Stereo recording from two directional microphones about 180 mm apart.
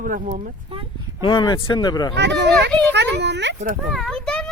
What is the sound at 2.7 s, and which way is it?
Speech, 5° left (ahead or behind).